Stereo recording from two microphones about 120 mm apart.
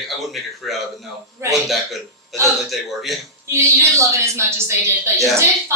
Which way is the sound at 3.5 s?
20° right (ahead or behind).